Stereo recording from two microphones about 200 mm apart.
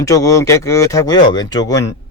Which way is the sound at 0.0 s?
15° left (ahead or behind).